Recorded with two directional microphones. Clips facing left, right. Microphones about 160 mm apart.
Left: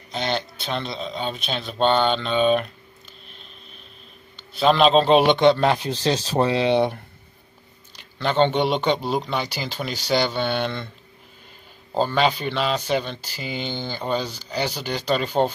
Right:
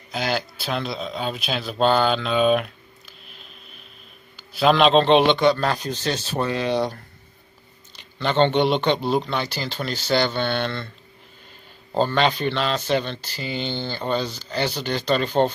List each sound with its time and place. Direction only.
0.1 s speech: 5° right (ahead or behind)
3.3 s a sound: 5° right (ahead or behind)
4.4 s speech: centre (ahead or behind); by 7.0 s 25° left (ahead or behind)
8.2 s speech: 5° left (ahead or behind)
11.9 s speech: 5° left (ahead or behind)